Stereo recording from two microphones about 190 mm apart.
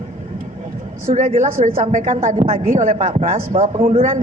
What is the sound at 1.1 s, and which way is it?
A man's voice, 40° right (ahead or behind).